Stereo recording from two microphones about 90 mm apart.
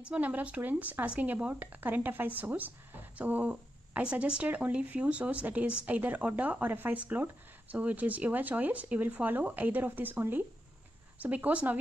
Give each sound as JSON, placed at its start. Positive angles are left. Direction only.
{"t": 0.0, "sound": "speech", "side_deg": -15}